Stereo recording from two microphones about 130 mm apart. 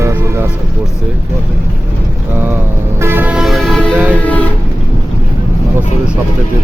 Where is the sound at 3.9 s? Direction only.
10° right (ahead or behind).